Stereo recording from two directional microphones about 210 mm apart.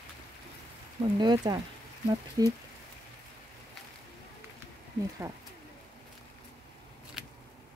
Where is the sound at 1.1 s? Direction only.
20° right (ahead or behind).